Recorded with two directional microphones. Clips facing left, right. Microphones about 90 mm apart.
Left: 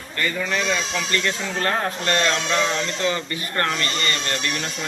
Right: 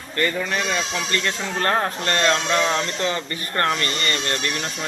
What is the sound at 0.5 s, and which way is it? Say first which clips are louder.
Speech: even; 20° right (ahead or behind).